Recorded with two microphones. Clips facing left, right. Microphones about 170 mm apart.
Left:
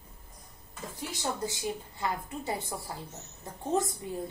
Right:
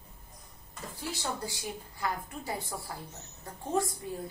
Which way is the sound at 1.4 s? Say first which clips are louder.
Left 5 dB; 20° left (ahead or behind).